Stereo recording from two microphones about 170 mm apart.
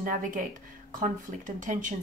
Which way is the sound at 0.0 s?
50° right (ahead or behind).